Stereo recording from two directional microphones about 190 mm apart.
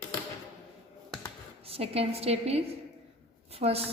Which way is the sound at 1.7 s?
30° right (ahead or behind).